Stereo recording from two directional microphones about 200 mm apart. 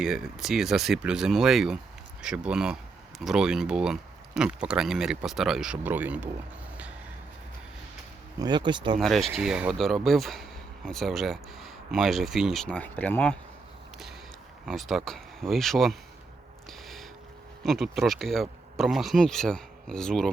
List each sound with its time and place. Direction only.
0.0 s speech: centre (ahead or behind)
8.4 s speech: 20° right (ahead or behind)
9.0 s speech: centre (ahead or behind)
14.7 s speech: centre (ahead or behind)
17.6 s speech: centre (ahead or behind)